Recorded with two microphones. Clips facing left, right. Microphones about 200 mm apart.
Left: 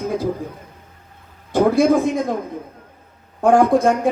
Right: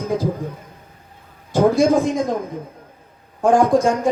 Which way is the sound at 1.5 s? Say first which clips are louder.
Even; 60° left (ahead or behind).